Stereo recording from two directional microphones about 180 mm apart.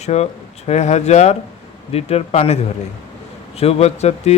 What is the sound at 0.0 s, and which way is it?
Speech, 35° left (ahead or behind).